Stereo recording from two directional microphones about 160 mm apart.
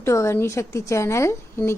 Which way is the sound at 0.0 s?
20° left (ahead or behind).